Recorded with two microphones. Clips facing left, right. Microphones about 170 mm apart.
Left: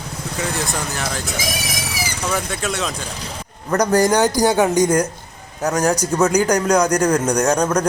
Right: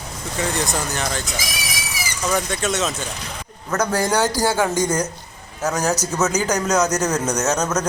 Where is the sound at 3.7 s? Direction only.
15° left (ahead or behind).